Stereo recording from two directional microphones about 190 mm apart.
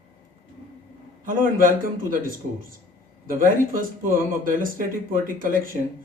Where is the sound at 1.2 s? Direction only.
45° right (ahead or behind).